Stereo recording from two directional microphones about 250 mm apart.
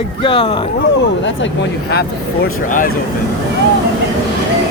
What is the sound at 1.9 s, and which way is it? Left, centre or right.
Speech, left.